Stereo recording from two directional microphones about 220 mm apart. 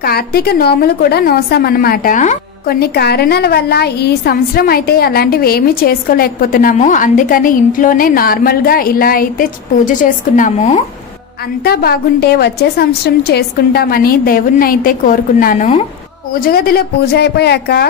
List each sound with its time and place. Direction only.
0.0 s a woman's voice: 45° left (ahead or behind)
11.6 s a woman's voice: 45° left (ahead or behind)